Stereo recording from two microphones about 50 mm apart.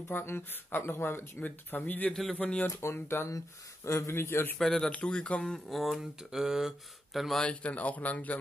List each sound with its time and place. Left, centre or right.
0.1 s speech: left
2.7 s speech: left
4.6 s speech: centre
4.9 s speech: left
5.5 s mantra: centre
7.3 s speech: left